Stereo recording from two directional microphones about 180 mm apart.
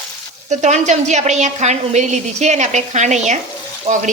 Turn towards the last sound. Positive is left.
turn(degrees=-40)  # may be behind; listen again after turning